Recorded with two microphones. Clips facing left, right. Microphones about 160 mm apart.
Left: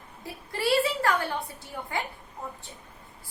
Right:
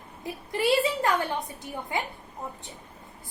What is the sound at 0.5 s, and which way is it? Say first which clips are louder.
A woman's voice: right 1 dB; 20° right (ahead or behind).